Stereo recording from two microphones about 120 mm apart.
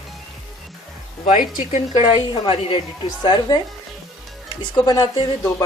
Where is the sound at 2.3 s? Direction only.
45° left (ahead or behind).